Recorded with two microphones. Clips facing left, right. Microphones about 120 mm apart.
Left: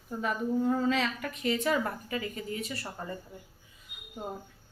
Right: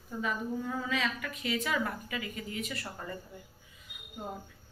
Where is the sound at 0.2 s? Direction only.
40° left (ahead or behind).